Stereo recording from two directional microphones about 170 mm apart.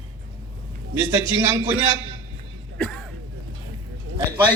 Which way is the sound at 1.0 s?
15° right (ahead or behind).